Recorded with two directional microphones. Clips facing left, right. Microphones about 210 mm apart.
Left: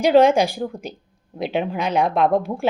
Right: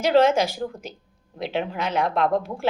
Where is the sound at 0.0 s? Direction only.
15° left (ahead or behind).